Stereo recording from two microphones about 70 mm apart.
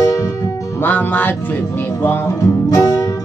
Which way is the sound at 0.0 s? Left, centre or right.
Left.